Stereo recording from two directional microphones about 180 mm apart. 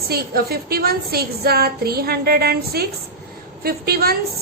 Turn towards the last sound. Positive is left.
turn(degrees=-60)  # may be behind; listen again after turning